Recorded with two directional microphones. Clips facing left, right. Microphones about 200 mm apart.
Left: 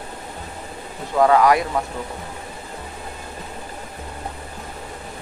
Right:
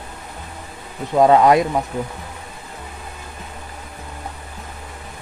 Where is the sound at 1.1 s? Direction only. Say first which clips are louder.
Right 3 dB; 20° right (ahead or behind).